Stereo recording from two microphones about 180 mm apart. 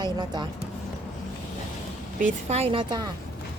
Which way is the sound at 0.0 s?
25° right (ahead or behind).